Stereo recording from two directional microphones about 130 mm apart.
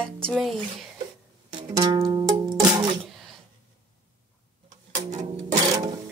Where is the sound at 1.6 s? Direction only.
30° right (ahead or behind).